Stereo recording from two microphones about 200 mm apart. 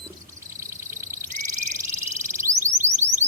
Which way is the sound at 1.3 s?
15° right (ahead or behind).